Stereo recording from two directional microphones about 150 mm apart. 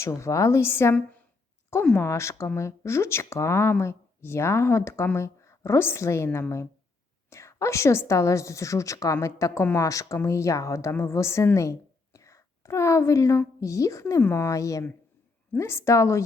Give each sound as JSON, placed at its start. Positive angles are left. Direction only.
{"t": 0.0, "sound": "speech", "side_deg": 20}
{"t": 2.0, "sound": "a woman's voice", "side_deg": 20}